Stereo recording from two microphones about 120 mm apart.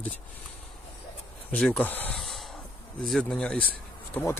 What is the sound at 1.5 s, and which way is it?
Speech, 5° left (ahead or behind).